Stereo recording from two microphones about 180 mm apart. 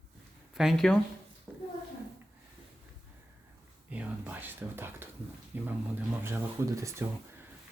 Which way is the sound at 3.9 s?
10° right (ahead or behind).